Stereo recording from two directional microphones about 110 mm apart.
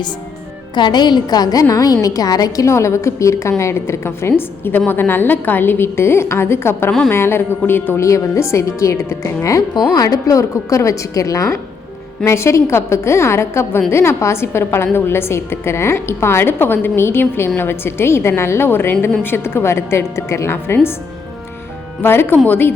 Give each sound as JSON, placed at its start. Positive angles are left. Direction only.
{"t": 0.8, "sound": "a woman's voice", "side_deg": 45}
{"t": 22.0, "sound": "a woman's voice", "side_deg": 20}